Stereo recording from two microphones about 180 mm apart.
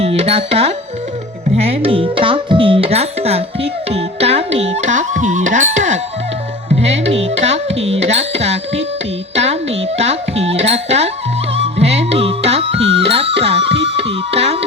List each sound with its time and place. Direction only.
0.0 s speech: 35° right (ahead or behind)
6.7 s music: 35° right (ahead or behind)
10.0 s speech: 35° right (ahead or behind)
11.5 s music: 35° right (ahead or behind)